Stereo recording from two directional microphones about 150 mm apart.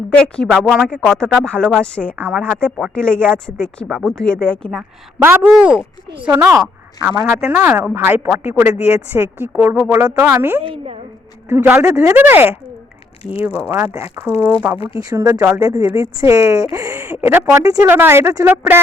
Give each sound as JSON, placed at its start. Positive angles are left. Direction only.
{"t": 0.1, "sound": "speech", "side_deg": 5}
{"t": 0.5, "sound": "speech", "side_deg": -5}
{"t": 2.1, "sound": "speech", "side_deg": -15}
{"t": 2.4, "sound": "speech", "side_deg": 5}
{"t": 4.8, "sound": "speech", "side_deg": -10}
{"t": 10.6, "sound": "a woman's voice", "side_deg": -40}
{"t": 11.4, "sound": "speech", "side_deg": -10}
{"t": 14.3, "sound": "speech", "side_deg": 15}
{"t": 14.8, "sound": "speech", "side_deg": 35}
{"t": 15.1, "sound": "speech", "side_deg": -25}